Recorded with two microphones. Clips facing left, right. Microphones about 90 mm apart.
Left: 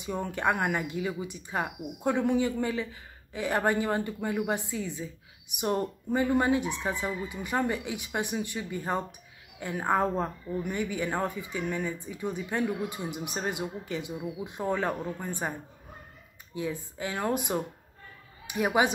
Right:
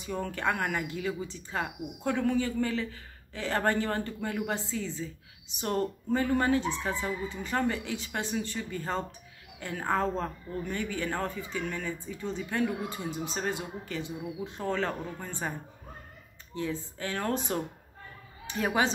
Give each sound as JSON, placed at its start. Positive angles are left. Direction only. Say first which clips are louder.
{"t": 0.0, "sound": "speech", "louder": "left 2 dB", "side_deg": 20}
{"t": 16.5, "sound": "speech", "louder": "even", "side_deg": 15}